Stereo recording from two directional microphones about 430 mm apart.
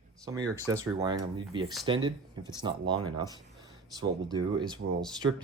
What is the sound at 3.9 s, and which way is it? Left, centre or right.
Speech, centre.